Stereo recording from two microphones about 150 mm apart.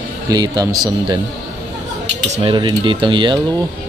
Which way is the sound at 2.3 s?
35° right (ahead or behind).